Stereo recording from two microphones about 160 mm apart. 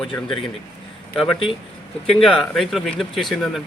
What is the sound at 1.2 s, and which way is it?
Speech, 35° left (ahead or behind).